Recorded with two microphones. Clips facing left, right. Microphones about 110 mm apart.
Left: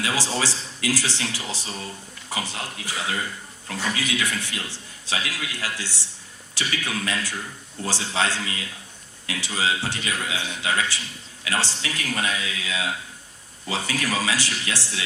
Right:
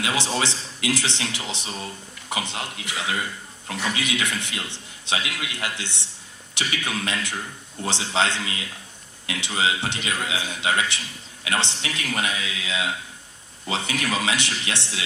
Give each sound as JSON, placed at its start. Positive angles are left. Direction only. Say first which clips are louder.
{"t": 0.0, "sound": "a man's voice", "louder": "right 1 dB", "side_deg": -20}